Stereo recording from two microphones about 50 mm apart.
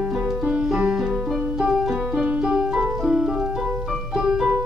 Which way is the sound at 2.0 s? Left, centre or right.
Right.